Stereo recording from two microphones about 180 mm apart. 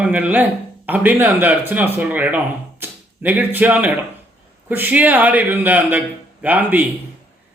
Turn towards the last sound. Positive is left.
turn(degrees=-10)  # may be behind; listen again after turning